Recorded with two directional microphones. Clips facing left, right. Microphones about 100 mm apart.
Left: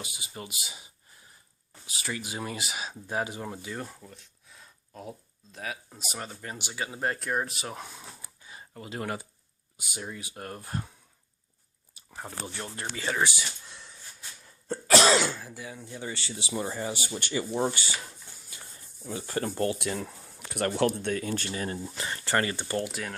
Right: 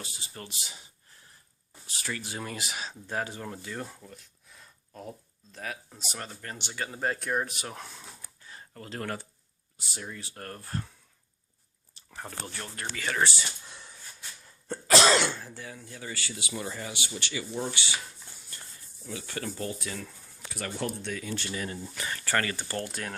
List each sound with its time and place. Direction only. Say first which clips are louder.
0.0 s speech: left 2 dB; 10° left (ahead or behind)
8.2 s a sound: left 1 dB; 10° left (ahead or behind)
9.7 s speech: left 2 dB; 10° left (ahead or behind)
11.9 s a sound: left 1 dB; 10° left (ahead or behind)
12.5 s speech: left 1 dB; 20° left (ahead or behind)
13.1 s speech: right 1 dB; 10° left (ahead or behind)
13.7 s dog: even; 5° right (ahead or behind)
14.4 s speech: left 2 dB; centre (ahead or behind)
15.7 s speech: left 5 dB; 20° left (ahead or behind)
16.9 s speech: left 4 dB; 45° left (ahead or behind)
19.0 s rub: left 5 dB; 35° left (ahead or behind)
19.5 s speech: left 6 dB; 60° left (ahead or behind); by 21.8 s 35° left (ahead or behind)
21.9 s speech: left 1 dB; 25° left (ahead or behind)
22.8 s speech: left 2 dB; 5° left (ahead or behind)